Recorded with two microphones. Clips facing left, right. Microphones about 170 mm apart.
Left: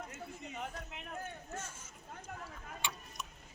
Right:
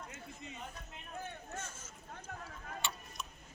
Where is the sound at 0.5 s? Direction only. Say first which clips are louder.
Left 5 dB; 85° left.